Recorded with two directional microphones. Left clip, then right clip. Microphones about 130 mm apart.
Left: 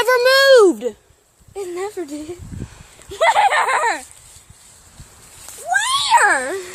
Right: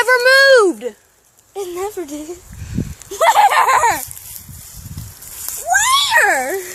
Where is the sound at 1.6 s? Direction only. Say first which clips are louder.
Right 2 dB; centre (ahead or behind).